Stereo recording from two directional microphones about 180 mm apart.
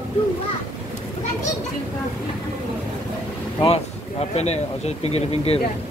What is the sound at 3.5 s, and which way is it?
Speech, 35° left (ahead or behind).